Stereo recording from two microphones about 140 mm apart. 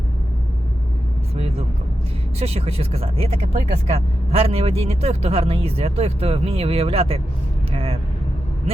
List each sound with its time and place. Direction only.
2.4 s speech: 45° right (ahead or behind)
7.7 s vehicle: 45° right (ahead or behind)